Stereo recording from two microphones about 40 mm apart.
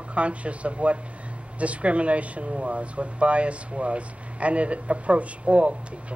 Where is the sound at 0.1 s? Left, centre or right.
Right.